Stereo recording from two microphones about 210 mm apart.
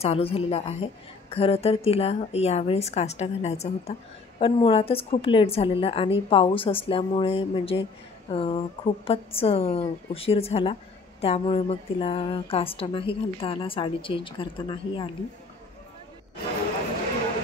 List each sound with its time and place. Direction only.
0.0 s speech: 30° left (ahead or behind)